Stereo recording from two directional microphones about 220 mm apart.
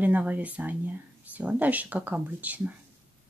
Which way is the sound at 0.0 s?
5° right (ahead or behind).